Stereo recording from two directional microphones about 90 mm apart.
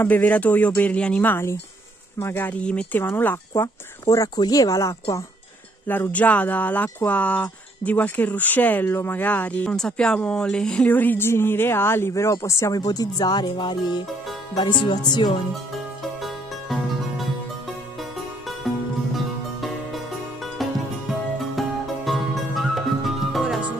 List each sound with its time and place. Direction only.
0.0 s speech: 20° left (ahead or behind)
2.6 s speech: 10° left (ahead or behind)
3.0 s speech: 25° left (ahead or behind)
4.4 s speech: 40° left (ahead or behind)
5.9 s speech: 20° left (ahead or behind)
10.9 s speech: 20° left (ahead or behind); by 14.0 s 55° left (ahead or behind)
14.6 s music: 60° left (ahead or behind)
16.0 s music: centre (ahead or behind)
19.1 s music: centre (ahead or behind)
21.5 s music: centre (ahead or behind)